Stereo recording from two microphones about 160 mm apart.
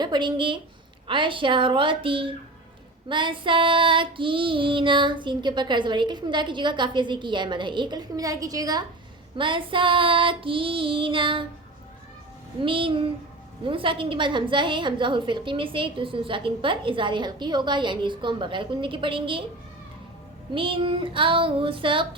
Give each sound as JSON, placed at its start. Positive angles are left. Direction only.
{"t": 0.0, "sound": "a woman's voice", "side_deg": -30}
{"t": 3.1, "sound": "child singing", "side_deg": -30}
{"t": 9.4, "sound": "a woman's voice", "side_deg": -30}
{"t": 12.5, "sound": "a woman's voice", "side_deg": -35}
{"t": 20.5, "sound": "a woman's voice", "side_deg": -35}